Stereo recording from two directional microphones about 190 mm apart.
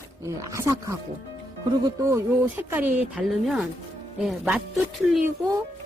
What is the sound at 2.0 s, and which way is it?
Speech, 15° right (ahead or behind).